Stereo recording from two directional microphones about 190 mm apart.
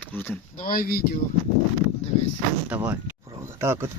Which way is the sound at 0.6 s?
50° left (ahead or behind).